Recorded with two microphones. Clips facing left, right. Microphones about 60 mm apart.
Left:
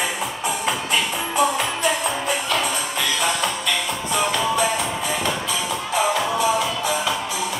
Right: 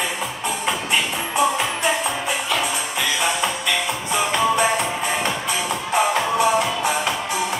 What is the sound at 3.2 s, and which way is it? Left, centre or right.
Music, centre.